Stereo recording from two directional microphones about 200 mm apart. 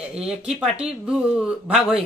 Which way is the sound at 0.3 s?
5° right (ahead or behind).